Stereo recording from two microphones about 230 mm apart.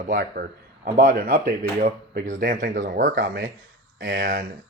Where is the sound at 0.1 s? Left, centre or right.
Right.